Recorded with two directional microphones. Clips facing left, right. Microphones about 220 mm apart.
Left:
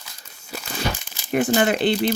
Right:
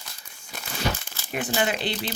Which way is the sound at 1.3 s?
50° left (ahead or behind).